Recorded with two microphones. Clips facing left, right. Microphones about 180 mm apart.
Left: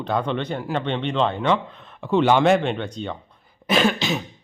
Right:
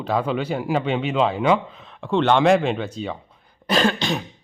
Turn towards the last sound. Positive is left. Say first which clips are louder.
# even
turn(degrees=5)  # may be behind; listen again after turning